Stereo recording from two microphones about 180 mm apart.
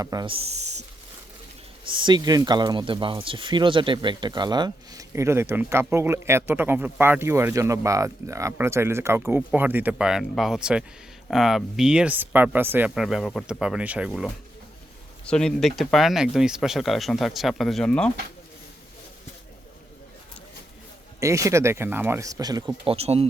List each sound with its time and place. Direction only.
0.0 s speech: 20° right (ahead or behind)
0.3 s speech: 35° right (ahead or behind)
1.9 s speech: 25° right (ahead or behind); by 14.3 s 5° right (ahead or behind)
15.3 s speech: 5° left (ahead or behind)
21.2 s speech: 15° right (ahead or behind); by 23.2 s 35° right (ahead or behind)